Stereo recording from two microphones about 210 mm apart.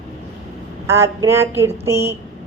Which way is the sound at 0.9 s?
15° right (ahead or behind).